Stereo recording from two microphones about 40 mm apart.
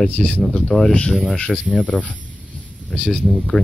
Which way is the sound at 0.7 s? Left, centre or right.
Left.